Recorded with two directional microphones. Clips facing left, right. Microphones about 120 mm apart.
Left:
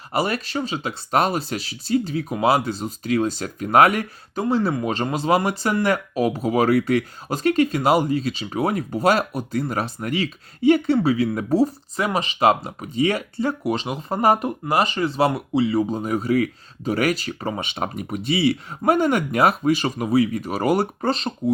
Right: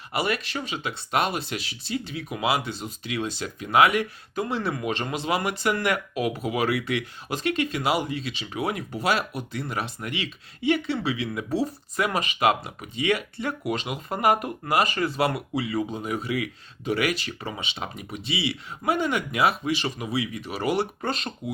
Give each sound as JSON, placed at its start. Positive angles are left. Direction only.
{"t": 0.1, "sound": "speech", "side_deg": 40}
{"t": 4.4, "sound": "speech", "side_deg": 30}
{"t": 11.9, "sound": "speech", "side_deg": 30}
{"t": 21.1, "sound": "speech", "side_deg": 30}